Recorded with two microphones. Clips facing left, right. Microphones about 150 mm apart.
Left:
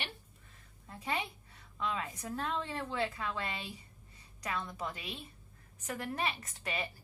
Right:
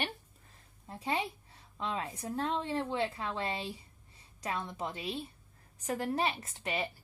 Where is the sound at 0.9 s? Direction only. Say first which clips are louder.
Right 3 dB; 30° right (ahead or behind).